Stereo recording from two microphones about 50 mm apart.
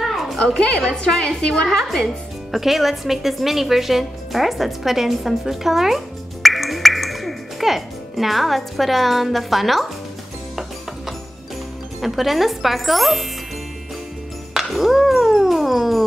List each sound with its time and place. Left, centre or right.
0.4 s a woman's voice: centre
1.8 s a woman's voice: centre
12.0 s speech: centre
14.5 s music: centre